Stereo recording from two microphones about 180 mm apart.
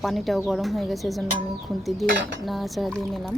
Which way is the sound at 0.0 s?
Centre (ahead or behind).